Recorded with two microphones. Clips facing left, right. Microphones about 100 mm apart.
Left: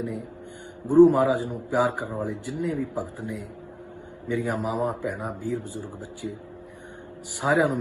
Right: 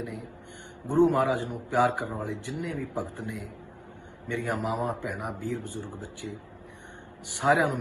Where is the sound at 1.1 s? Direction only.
15° left (ahead or behind).